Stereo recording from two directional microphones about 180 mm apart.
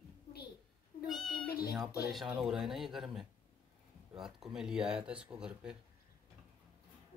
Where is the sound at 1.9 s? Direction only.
60° left (ahead or behind).